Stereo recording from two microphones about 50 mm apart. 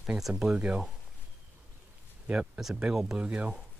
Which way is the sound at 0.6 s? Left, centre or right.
Right.